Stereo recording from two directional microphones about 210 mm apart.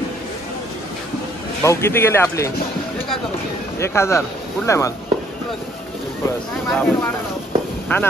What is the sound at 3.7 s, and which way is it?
Speech, 10° left (ahead or behind).